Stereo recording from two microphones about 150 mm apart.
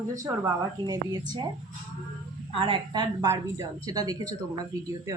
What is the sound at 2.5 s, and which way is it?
Speech, 35° right (ahead or behind).